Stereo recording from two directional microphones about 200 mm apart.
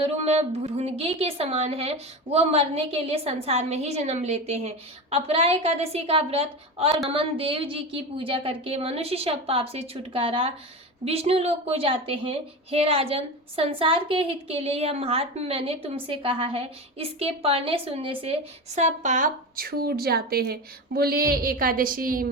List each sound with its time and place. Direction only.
0.0 s a woman's voice: 30° right (ahead or behind)